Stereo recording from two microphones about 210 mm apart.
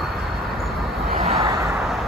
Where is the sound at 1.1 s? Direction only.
30° right (ahead or behind).